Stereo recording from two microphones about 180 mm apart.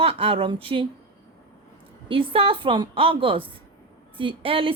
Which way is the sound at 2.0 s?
30° right (ahead or behind).